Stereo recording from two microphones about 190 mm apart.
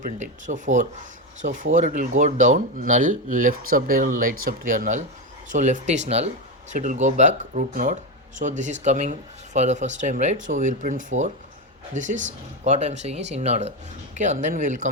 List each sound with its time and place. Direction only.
0.0 s speech: 40° right (ahead or behind)